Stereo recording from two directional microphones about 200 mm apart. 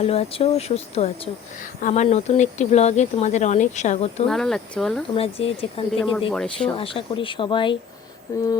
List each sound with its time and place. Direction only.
0.0 s speech: 30° left (ahead or behind)
4.3 s speech: centre (ahead or behind)
5.1 s speech: 30° left (ahead or behind)
6.3 s speech: 5° left (ahead or behind)
6.7 s speech: 25° left (ahead or behind)
8.3 s a sound: 15° left (ahead or behind)